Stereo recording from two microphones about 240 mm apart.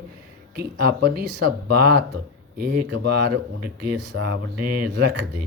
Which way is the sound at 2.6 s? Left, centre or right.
Right.